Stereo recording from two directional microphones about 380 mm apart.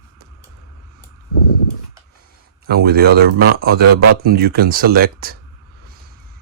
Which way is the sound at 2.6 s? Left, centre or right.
Right.